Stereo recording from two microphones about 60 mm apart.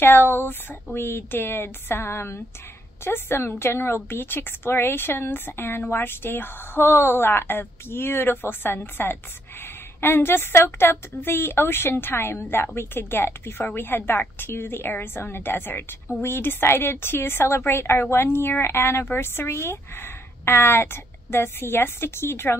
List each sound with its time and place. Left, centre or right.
0.0 s a woman's voice: left